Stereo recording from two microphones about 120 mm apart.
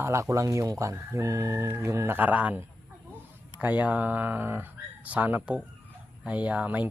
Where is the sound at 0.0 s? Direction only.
25° right (ahead or behind).